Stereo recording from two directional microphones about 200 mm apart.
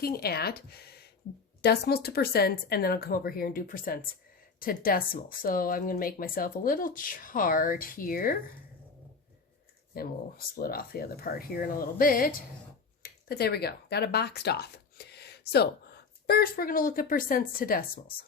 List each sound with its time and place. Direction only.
0.0 s speech: 50° left (ahead or behind)
9.9 s speech: 50° left (ahead or behind)